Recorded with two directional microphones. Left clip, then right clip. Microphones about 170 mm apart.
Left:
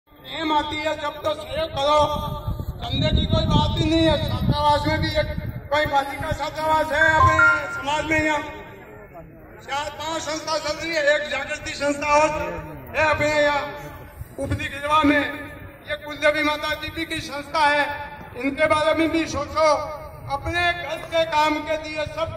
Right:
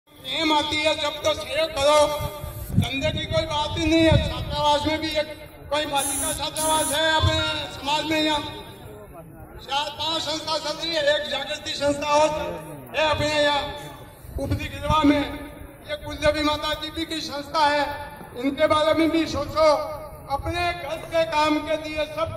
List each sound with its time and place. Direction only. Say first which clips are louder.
0.3 s a man's voice: right 1 dB; 5° right (ahead or behind); by 7.5 s 30° right (ahead or behind)
7.7 s speech: left 2 dB; 55° right (ahead or behind)
9.7 s a man's voice: right 1 dB; 25° right (ahead or behind)
10.4 s speech: left 1 dB; 65° right (ahead or behind)
11.8 s a man's voice: left 1 dB; 35° right (ahead or behind); by 13.7 s 20° right (ahead or behind)
14.4 s a man's voice: left 3 dB; 10° left (ahead or behind); by 22.3 s 40° left (ahead or behind)